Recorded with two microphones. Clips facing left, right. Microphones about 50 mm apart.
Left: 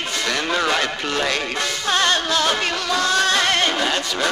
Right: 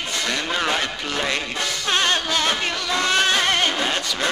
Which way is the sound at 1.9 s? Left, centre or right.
Centre.